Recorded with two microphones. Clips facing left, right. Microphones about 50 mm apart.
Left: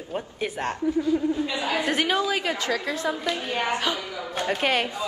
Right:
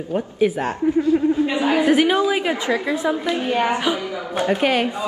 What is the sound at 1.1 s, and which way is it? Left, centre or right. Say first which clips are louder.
Speech: right 6 dB; right.